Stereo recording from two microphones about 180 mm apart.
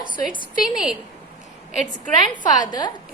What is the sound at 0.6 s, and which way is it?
Speech, centre (ahead or behind).